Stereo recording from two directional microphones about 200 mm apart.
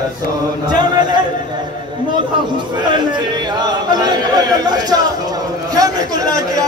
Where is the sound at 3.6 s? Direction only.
20° right (ahead or behind).